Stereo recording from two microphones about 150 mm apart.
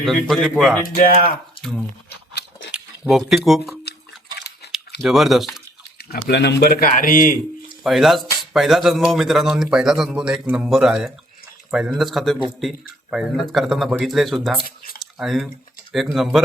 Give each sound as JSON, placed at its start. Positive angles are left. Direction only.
{"t": 0.0, "sound": "speech", "side_deg": 0}
{"t": 0.8, "sound": "speech", "side_deg": 65}
{"t": 2.7, "sound": "speech", "side_deg": -5}
{"t": 3.9, "sound": "a sound", "side_deg": 90}
{"t": 5.0, "sound": "speech", "side_deg": 0}
{"t": 6.0, "sound": "speech", "side_deg": 90}
{"t": 7.9, "sound": "speech", "side_deg": 0}